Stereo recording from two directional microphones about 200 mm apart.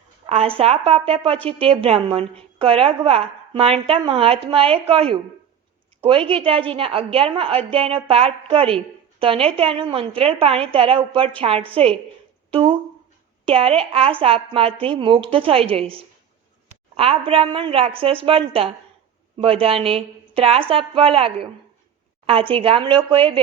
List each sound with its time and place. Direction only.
0.3 s a woman's voice: 30° right (ahead or behind)